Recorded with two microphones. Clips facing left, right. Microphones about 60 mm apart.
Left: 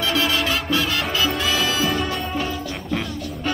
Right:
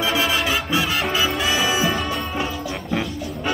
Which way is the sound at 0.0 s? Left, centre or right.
Centre.